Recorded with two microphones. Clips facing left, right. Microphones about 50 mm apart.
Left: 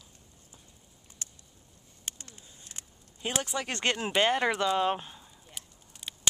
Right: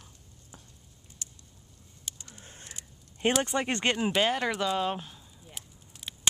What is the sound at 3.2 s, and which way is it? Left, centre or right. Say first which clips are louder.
Speech: right 7 dB; right.